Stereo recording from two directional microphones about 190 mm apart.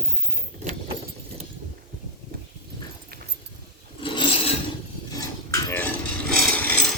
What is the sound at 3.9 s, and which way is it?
Filing, 25° left (ahead or behind).